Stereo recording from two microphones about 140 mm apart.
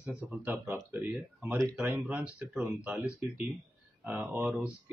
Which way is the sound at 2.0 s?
10° right (ahead or behind).